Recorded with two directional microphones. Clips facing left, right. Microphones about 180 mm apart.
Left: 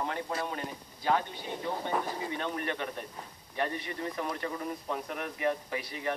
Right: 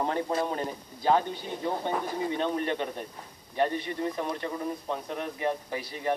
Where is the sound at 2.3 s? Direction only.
30° right (ahead or behind).